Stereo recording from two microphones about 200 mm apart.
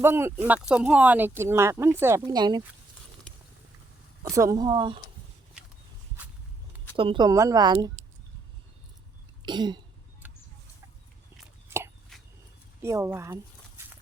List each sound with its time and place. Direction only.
0.0 s speech: 10° right (ahead or behind)
4.2 s speech: 15° right (ahead or behind)
6.9 s speech: 25° right (ahead or behind)
9.4 s throat clearing: 20° right (ahead or behind)
12.1 s a sound: centre (ahead or behind)
12.8 s speech: 15° right (ahead or behind)